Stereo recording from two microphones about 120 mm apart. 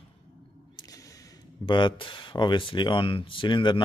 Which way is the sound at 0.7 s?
30° left (ahead or behind).